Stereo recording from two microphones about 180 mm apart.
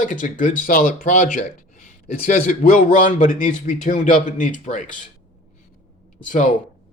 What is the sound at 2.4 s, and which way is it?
Speech, 50° left (ahead or behind).